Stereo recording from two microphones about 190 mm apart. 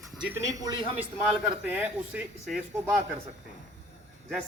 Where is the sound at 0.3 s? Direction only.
15° right (ahead or behind).